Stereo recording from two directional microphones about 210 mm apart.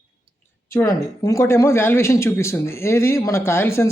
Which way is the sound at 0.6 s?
15° left (ahead or behind).